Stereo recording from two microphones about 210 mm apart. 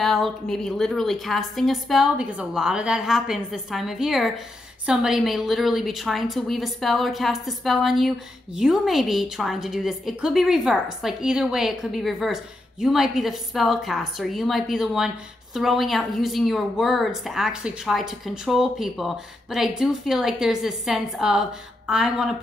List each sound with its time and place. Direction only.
0.0 s a woman's voice: centre (ahead or behind)